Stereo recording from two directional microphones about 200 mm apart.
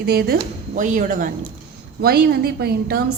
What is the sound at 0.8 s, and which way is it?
Speech, 40° right (ahead or behind).